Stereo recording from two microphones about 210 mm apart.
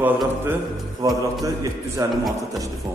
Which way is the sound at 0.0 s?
10° right (ahead or behind).